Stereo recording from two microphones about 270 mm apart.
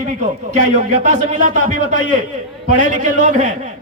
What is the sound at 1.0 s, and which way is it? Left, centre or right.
A man's voice, right.